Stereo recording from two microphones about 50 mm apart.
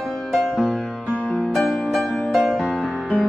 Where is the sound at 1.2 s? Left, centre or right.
Left.